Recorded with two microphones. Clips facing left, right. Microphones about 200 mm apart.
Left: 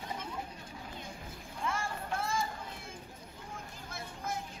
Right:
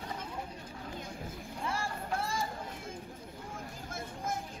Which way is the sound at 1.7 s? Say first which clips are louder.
Right 1 dB; 35° right (ahead or behind).